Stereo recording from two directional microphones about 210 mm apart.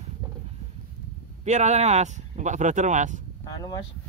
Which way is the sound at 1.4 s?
35° right (ahead or behind).